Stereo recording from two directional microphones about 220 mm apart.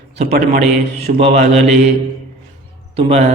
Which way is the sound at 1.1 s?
35° right (ahead or behind).